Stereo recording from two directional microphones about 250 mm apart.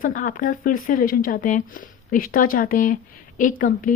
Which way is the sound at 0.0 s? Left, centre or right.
Left.